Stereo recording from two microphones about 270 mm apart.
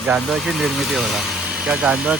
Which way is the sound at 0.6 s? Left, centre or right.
Centre.